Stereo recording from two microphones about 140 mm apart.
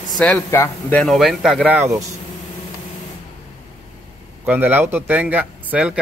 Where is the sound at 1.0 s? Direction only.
Centre (ahead or behind).